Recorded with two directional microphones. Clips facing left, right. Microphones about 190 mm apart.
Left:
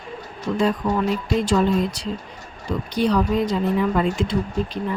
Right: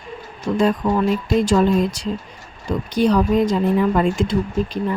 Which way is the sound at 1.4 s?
45° right (ahead or behind).